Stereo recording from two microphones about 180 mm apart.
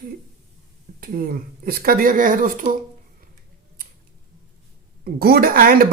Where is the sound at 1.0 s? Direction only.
55° right (ahead or behind).